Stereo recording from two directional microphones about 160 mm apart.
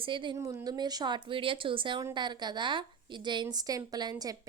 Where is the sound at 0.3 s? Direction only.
20° right (ahead or behind).